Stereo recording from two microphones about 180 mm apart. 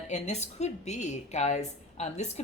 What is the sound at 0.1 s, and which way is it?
A woman's voice, 40° left (ahead or behind).